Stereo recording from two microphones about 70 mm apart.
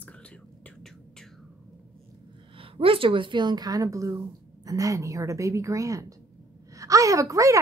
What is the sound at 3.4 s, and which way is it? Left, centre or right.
A woman's voice, right.